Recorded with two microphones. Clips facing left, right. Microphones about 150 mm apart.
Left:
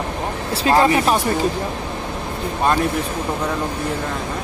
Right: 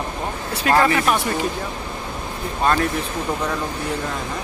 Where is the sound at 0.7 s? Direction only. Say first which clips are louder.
Left 2 dB; 20° left (ahead or behind).